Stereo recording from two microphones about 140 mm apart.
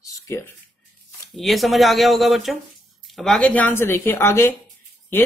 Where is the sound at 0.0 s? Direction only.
20° left (ahead or behind).